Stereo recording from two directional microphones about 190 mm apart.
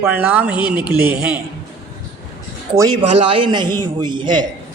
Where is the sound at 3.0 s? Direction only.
30° right (ahead or behind).